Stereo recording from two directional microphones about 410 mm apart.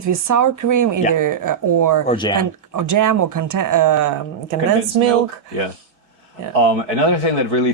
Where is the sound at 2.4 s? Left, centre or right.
Right.